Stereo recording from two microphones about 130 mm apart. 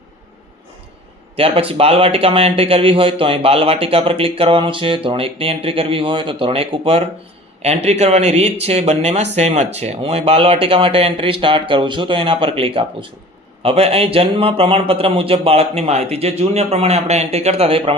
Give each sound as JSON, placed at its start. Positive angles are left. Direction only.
{"t": 1.4, "sound": "a man's voice", "side_deg": -45}